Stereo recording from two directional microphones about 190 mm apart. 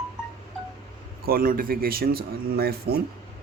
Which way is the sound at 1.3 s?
50° right (ahead or behind).